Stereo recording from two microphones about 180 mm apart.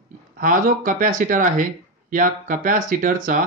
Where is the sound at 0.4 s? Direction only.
50° right (ahead or behind).